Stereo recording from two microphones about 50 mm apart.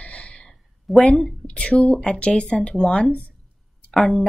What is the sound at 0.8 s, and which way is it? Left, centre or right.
Speech, centre.